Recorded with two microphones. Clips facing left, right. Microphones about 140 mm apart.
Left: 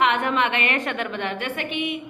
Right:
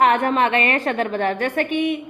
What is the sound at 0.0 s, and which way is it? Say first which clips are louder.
A woman's voice: right 4 dB; 40° right (ahead or behind).